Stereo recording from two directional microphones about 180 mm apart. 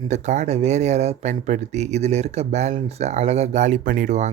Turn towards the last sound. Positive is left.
turn(degrees=-40)  # may be behind; listen again after turning